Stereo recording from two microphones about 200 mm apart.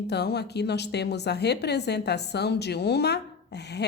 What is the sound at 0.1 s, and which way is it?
A woman's voice, 55° left (ahead or behind).